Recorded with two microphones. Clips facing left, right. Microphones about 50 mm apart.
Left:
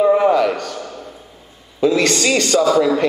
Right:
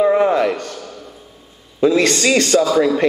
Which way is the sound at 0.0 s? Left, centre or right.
Centre.